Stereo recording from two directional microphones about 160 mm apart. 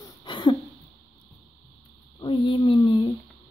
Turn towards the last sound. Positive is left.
turn(degrees=30)  # may be behind; listen again after turning